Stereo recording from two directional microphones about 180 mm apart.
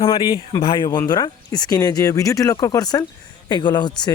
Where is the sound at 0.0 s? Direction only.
20° left (ahead or behind).